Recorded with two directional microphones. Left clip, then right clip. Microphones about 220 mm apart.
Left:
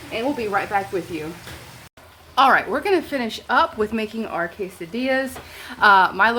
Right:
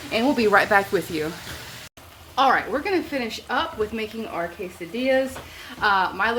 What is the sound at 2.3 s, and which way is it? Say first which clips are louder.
Speech: left 3 dB; 45° left (ahead or behind).